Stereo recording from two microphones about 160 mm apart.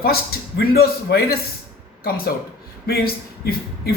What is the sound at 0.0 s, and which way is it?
A man's voice, 70° left (ahead or behind).